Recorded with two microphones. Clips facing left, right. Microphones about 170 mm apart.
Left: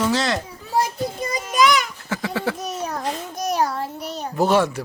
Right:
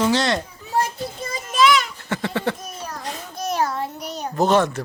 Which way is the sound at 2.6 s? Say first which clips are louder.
Left 6 dB; 75° left (ahead or behind).